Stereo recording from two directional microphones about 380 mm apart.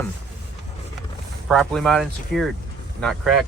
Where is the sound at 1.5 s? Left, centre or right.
Centre.